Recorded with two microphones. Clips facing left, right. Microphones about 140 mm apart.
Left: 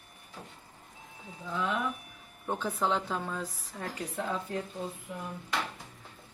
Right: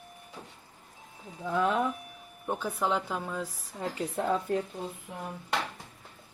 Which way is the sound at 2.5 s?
10° right (ahead or behind).